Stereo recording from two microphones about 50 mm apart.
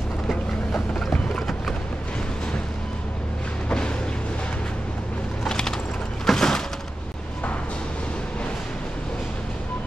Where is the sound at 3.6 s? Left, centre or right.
Centre.